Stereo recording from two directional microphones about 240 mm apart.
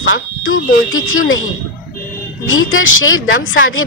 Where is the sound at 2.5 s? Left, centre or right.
Left.